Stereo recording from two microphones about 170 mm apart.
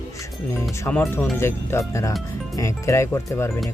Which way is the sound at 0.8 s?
15° left (ahead or behind).